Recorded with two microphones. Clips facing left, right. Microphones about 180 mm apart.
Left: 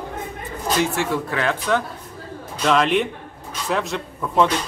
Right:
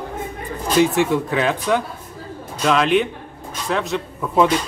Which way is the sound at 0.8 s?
20° right (ahead or behind).